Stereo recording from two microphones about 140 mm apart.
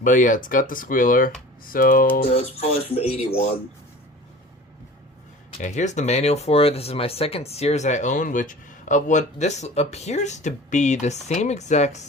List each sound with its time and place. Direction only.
0.0 s speech: 70° left (ahead or behind)
1.6 s speech: 90° left
2.3 s speech: 50° left (ahead or behind)
5.5 s speech: 60° left (ahead or behind)